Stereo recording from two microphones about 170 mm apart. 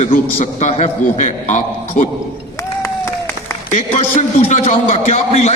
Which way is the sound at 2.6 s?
20° left (ahead or behind).